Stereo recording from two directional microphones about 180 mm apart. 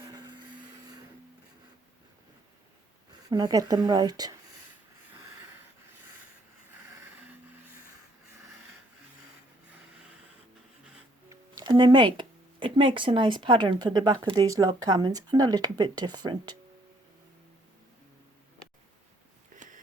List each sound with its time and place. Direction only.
0.0 s a sound: 25° right (ahead or behind)
3.1 s speech: 20° right (ahead or behind)
11.3 s speech: 25° right (ahead or behind)